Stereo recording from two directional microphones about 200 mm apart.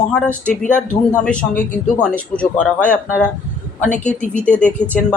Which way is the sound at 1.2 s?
5° left (ahead or behind).